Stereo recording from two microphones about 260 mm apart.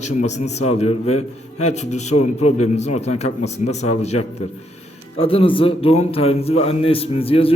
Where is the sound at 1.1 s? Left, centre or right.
Left.